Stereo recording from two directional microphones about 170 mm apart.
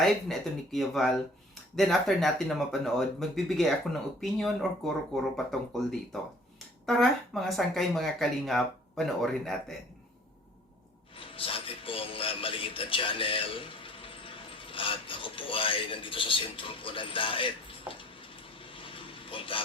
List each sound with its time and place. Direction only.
0.0 s speech: centre (ahead or behind)
11.1 s speech: 30° left (ahead or behind)